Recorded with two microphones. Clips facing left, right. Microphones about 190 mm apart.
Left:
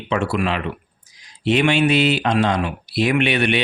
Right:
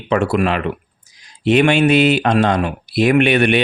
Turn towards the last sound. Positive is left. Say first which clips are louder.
# right 5 dB
turn(degrees=-50)  # may be behind; listen again after turning